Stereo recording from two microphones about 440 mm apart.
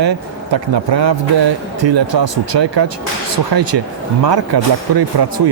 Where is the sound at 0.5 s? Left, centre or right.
Right.